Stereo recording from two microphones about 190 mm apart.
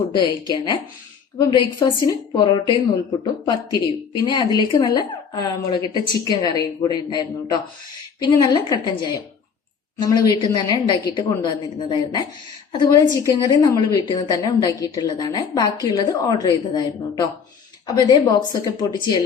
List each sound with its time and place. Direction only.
0.1 s a woman's voice: 25° left (ahead or behind)